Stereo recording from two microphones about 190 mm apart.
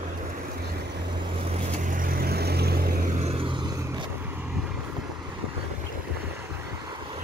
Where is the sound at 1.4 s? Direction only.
35° right (ahead or behind).